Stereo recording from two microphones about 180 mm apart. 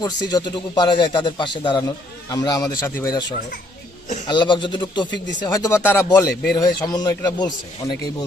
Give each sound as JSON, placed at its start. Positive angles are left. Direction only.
{"t": 0.0, "sound": "speech", "side_deg": 20}